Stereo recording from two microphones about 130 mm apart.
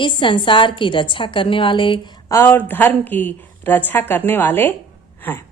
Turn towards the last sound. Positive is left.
turn(degrees=15)  # may be behind; listen again after turning